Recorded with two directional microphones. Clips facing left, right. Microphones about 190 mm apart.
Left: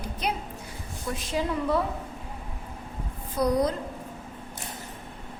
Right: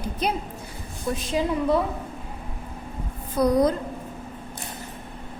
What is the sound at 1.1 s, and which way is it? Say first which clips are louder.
Speech: right 3 dB; 20° right (ahead or behind).